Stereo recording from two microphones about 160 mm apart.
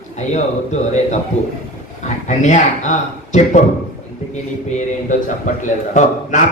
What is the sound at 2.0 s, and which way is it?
A man's voice, 45° left (ahead or behind).